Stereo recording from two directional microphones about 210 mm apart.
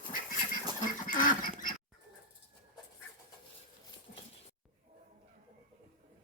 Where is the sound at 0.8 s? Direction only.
40° left (ahead or behind).